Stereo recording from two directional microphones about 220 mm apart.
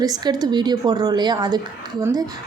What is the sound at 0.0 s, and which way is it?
Speech, 15° right (ahead or behind).